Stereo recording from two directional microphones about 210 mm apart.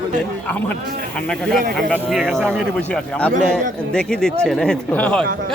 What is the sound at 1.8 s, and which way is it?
Speech, centre (ahead or behind).